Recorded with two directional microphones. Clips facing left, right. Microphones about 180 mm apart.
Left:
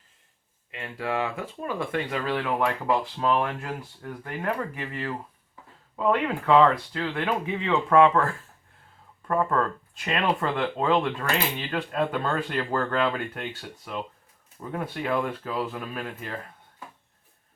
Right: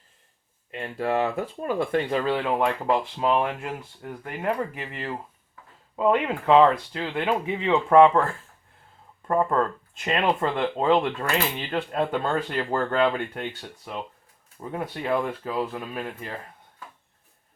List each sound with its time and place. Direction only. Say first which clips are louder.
0.7 s speech: right 4 dB; 40° right (ahead or behind)
9.2 s speech: right 2 dB; 25° right (ahead or behind)